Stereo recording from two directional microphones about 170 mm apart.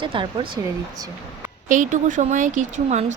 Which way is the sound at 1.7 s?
50° right (ahead or behind).